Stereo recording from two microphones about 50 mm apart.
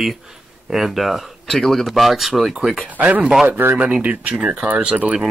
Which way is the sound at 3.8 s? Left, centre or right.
Right.